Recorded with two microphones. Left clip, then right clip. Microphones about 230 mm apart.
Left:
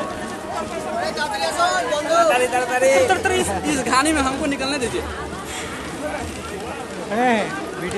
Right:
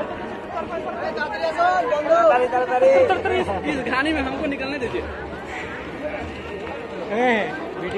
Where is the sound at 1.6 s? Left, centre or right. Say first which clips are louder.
Right 3 dB; left.